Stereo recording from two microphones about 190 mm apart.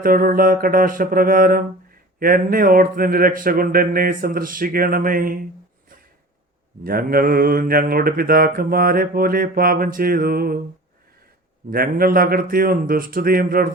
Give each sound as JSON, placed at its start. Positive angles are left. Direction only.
{"t": 0.0, "sound": "mantra", "side_deg": -50}
{"t": 6.8, "sound": "mantra", "side_deg": -50}
{"t": 11.7, "sound": "mantra", "side_deg": -50}